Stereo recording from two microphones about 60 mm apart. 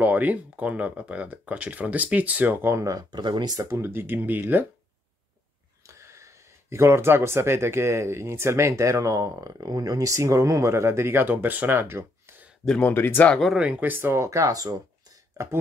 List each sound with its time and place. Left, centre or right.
0.0 s speech: right
2.8 s speech: right
3.6 s speech: right
5.9 s speech: right
11.2 s speech: right
12.8 s speech: left
13.7 s speech: right